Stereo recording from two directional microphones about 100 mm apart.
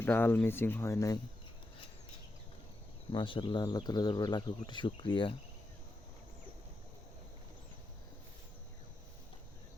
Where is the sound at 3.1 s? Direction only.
55° left (ahead or behind).